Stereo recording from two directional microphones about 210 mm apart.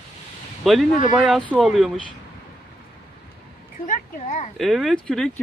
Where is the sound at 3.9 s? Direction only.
35° left (ahead or behind).